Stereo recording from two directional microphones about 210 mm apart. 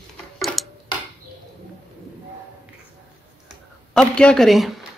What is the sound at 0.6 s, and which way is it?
Tick-tock, centre (ahead or behind).